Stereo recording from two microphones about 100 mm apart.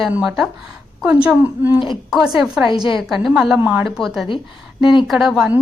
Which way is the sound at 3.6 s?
20° right (ahead or behind).